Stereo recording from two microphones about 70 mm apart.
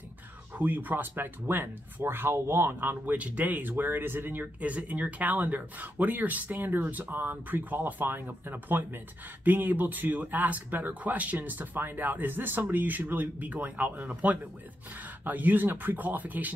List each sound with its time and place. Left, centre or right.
0.6 s speech: right